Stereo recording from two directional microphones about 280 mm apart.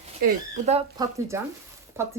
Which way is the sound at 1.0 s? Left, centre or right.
Centre.